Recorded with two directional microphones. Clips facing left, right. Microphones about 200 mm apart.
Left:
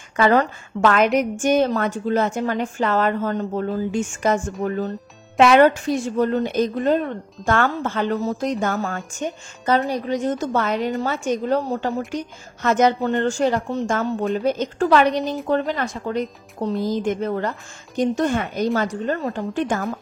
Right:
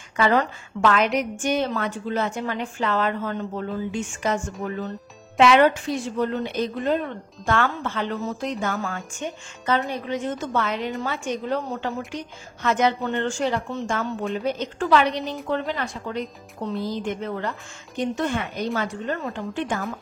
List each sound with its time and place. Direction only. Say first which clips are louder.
0.1 s a woman's voice: left 4 dB; 45° left (ahead or behind)